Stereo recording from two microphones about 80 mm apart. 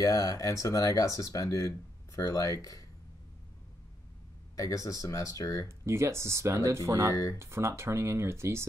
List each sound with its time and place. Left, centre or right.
0.0 s speech: left
4.6 s speech: left
5.7 s speech: right